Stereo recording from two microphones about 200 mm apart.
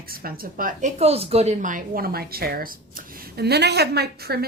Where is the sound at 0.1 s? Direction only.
50° right (ahead or behind).